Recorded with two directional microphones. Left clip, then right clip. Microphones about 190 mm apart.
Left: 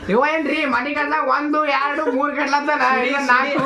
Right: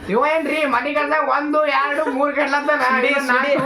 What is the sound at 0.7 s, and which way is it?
A man's voice, 5° left (ahead or behind).